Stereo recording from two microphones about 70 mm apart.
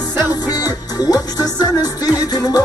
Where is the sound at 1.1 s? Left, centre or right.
Left.